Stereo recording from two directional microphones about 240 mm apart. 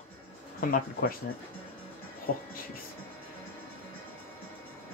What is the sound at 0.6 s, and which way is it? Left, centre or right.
Speech, left.